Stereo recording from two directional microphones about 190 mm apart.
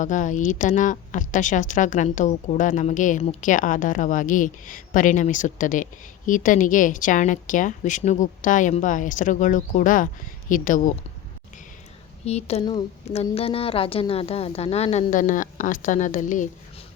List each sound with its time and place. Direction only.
0.0 s speech: 40° left (ahead or behind)
12.2 s a woman's voice: 35° left (ahead or behind)